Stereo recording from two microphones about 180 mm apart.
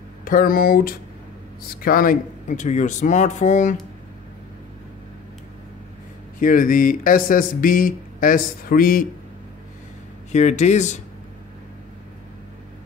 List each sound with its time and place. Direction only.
0.2 s speech: 50° left (ahead or behind)
6.4 s speech: 50° left (ahead or behind)
10.3 s speech: 40° left (ahead or behind)